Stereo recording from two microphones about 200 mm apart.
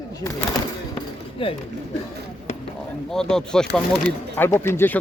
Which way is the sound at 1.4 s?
25° left (ahead or behind).